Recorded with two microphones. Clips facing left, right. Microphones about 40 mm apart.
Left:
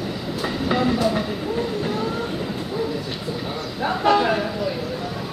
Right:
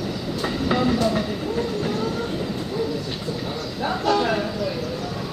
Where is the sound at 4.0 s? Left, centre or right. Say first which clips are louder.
Left 3 dB; left.